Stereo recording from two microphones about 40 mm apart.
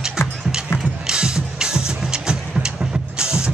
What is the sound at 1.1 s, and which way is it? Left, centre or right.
Music, right.